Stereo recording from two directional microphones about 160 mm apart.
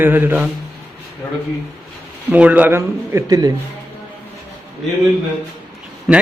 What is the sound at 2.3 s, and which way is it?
Speech, 10° right (ahead or behind).